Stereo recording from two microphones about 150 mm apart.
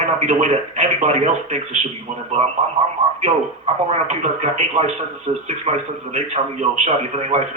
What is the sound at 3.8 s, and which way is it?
Speech, 45° right (ahead or behind).